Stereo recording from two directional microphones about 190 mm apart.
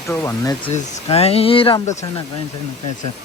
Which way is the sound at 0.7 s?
30° left (ahead or behind).